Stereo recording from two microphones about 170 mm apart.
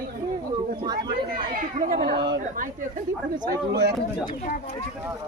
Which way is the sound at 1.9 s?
60° right (ahead or behind).